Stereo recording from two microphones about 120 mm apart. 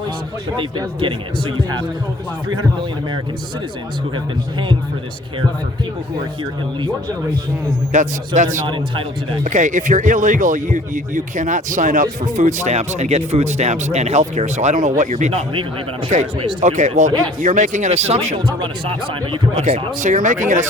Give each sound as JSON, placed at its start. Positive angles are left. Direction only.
{"t": 0.5, "sound": "speech", "side_deg": -45}
{"t": 7.9, "sound": "a man's voice", "side_deg": -85}
{"t": 8.6, "sound": "speech", "side_deg": -45}
{"t": 9.4, "sound": "a man's voice", "side_deg": -90}
{"t": 16.6, "sound": "speech", "side_deg": -80}
{"t": 17.4, "sound": "speech", "side_deg": -90}
{"t": 18.3, "sound": "speech", "side_deg": -40}
{"t": 20.0, "sound": "a man's voice", "side_deg": -90}